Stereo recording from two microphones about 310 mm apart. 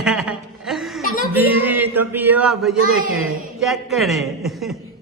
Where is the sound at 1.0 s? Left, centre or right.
Left.